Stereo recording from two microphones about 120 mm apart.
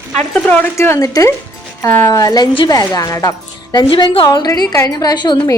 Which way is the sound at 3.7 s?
40° left (ahead or behind).